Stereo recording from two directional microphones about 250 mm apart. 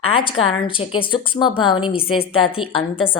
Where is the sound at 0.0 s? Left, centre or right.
Left.